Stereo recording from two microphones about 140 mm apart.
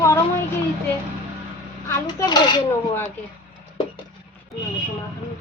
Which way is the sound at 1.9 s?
30° left (ahead or behind).